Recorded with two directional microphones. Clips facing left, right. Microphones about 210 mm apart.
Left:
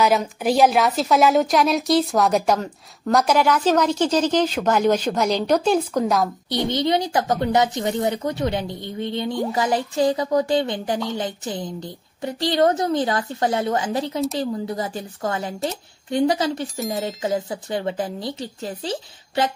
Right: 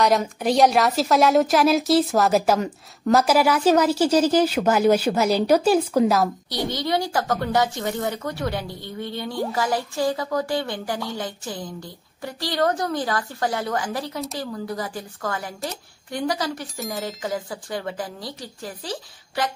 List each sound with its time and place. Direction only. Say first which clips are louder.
0.0 s a woman's voice: left 1 dB; centre (ahead or behind)
6.7 s a woman's voice: left 3 dB; 20° left (ahead or behind)
16.6 s a woman's voice: left 5 dB; centre (ahead or behind)
17.0 s a woman's voice: left 4 dB; 20° left (ahead or behind)